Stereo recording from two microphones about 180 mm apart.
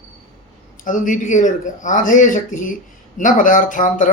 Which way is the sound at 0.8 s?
45° left (ahead or behind).